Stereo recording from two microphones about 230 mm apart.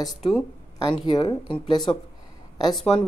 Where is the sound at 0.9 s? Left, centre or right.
Centre.